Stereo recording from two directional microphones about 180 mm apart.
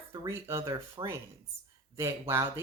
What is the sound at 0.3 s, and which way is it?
Speech, 15° right (ahead or behind).